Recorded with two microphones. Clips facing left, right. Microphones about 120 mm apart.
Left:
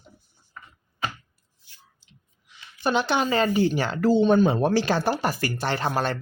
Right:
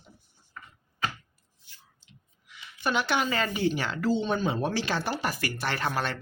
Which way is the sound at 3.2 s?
30° left (ahead or behind).